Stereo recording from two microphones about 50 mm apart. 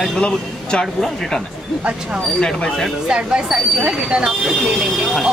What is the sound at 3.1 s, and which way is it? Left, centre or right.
Speech, centre.